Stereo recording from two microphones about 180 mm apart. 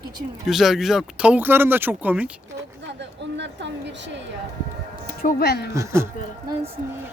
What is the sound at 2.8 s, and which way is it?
A woman's voice, 80° right.